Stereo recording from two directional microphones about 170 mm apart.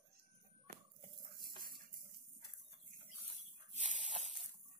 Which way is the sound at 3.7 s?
45° right (ahead or behind).